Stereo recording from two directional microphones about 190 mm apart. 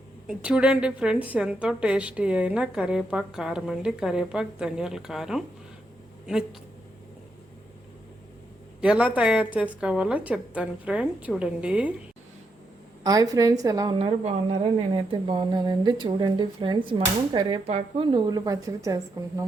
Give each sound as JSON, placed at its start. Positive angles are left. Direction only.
{"t": 0.3, "sound": "a woman's voice", "side_deg": -5}
{"t": 8.8, "sound": "a woman's voice", "side_deg": -5}
{"t": 13.0, "sound": "speech", "side_deg": -20}
{"t": 14.0, "sound": "a woman's voice", "side_deg": -30}